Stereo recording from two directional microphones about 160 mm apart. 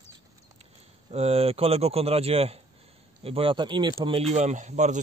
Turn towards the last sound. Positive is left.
turn(degrees=-45)  # may be behind; listen again after turning